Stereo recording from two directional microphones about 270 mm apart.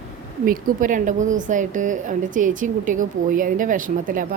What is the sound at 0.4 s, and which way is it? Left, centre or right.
A woman's voice, right.